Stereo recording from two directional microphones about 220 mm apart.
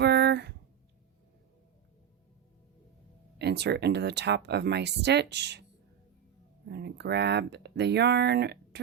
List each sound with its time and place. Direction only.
0.0 s a sound: 50° right (ahead or behind)
3.3 s speech: 50° right (ahead or behind)
6.7 s speech: 50° right (ahead or behind)